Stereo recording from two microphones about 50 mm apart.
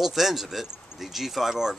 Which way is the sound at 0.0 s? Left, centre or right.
Centre.